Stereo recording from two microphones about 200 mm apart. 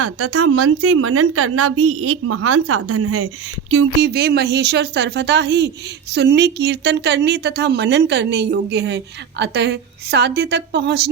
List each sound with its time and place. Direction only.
0.0 s a woman's voice: 90° right
4.1 s speech: 55° right (ahead or behind)